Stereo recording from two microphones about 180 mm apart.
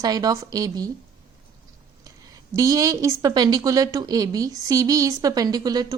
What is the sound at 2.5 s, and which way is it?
A woman's voice, 20° right (ahead or behind).